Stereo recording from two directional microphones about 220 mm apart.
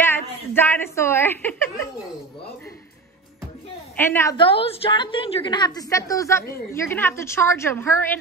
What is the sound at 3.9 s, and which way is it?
Speech, 10° left (ahead or behind).